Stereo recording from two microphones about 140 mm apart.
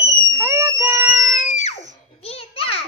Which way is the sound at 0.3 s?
20° right (ahead or behind).